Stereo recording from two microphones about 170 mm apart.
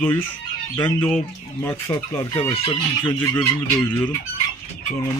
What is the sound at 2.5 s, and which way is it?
Speech, 35° left (ahead or behind).